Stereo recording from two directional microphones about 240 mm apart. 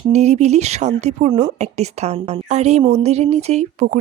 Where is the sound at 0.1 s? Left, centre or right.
Right.